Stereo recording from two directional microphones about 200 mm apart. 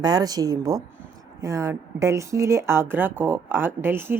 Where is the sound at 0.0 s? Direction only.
20° right (ahead or behind).